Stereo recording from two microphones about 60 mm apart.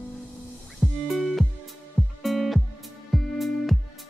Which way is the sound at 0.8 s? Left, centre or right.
Centre.